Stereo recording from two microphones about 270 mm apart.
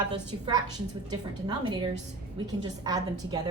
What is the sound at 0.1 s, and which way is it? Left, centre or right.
A woman's voice, centre.